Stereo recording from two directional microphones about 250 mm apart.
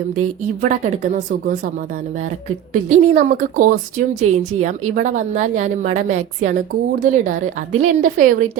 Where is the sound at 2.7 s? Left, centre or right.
Right.